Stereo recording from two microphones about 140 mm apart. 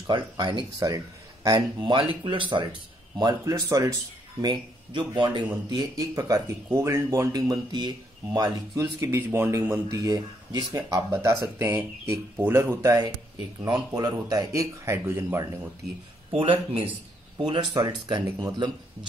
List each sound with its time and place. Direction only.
0.0 s speech: 35° right (ahead or behind); by 15.7 s 15° right (ahead or behind)
16.3 s speech: 40° right (ahead or behind)